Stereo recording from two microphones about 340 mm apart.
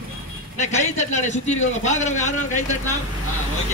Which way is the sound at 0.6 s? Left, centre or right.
Centre.